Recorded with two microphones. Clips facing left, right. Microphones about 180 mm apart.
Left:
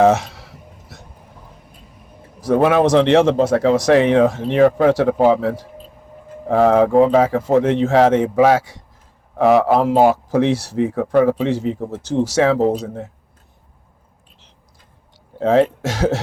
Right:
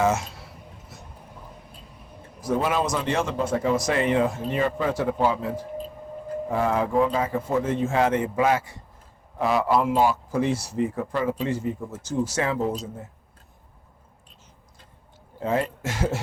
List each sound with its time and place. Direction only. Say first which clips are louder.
0.0 s a sound: left 9 dB; 70° left (ahead or behind)
2.5 s speech: left 10 dB; 65° left (ahead or behind); by 8.8 s 90° left
9.4 s a man's voice: left 8 dB; 70° left (ahead or behind)
15.4 s speech: left 11 dB; 90° left